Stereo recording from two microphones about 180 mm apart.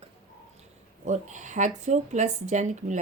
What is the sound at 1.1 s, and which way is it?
Speech, 40° right (ahead or behind).